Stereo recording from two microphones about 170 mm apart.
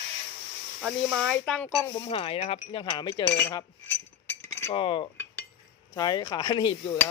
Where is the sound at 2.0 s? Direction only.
35° left (ahead or behind).